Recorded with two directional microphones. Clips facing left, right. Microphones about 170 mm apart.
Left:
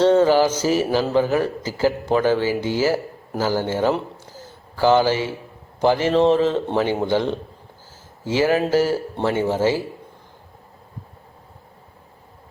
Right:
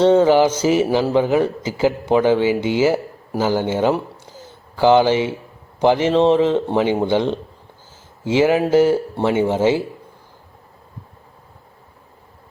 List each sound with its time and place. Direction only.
0.0 s a man's voice: 15° right (ahead or behind)